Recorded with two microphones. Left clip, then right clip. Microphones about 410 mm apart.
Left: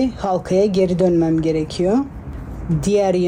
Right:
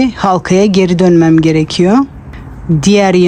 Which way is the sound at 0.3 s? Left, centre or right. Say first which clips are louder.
Right 2 dB; centre.